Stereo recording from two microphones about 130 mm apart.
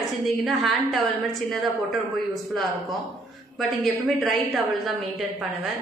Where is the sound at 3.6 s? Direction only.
Centre (ahead or behind).